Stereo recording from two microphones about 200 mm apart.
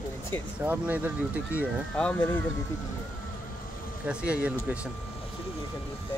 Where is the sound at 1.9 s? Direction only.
5° left (ahead or behind).